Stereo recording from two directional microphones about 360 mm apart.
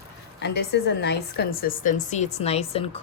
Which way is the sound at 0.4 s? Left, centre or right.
Left.